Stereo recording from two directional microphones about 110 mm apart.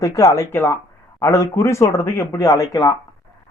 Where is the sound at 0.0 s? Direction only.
30° left (ahead or behind).